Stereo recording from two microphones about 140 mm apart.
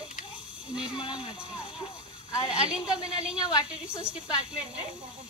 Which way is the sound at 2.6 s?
5° right (ahead or behind).